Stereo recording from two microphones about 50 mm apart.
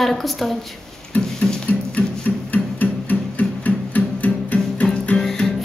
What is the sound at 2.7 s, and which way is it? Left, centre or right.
Music, left.